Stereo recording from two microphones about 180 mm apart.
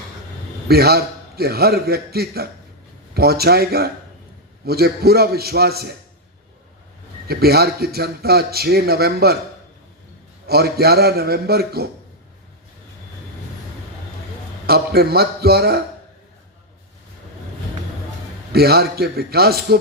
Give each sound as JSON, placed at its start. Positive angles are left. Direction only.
{"t": 0.7, "sound": "a man's voice", "side_deg": -60}
{"t": 7.3, "sound": "a man's voice", "side_deg": -60}
{"t": 10.4, "sound": "a man's voice", "side_deg": -60}
{"t": 14.7, "sound": "a man's voice", "side_deg": -60}
{"t": 18.5, "sound": "a man's voice", "side_deg": -60}